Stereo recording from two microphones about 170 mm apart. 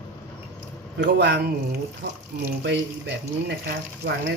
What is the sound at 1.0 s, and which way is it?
Speech, 90° right.